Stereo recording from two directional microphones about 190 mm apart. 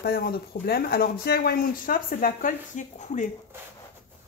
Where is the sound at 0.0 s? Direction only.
55° left (ahead or behind).